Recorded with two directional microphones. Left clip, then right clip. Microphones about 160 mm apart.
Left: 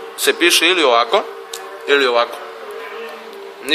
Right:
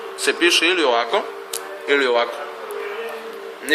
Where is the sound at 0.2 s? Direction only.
55° left (ahead or behind).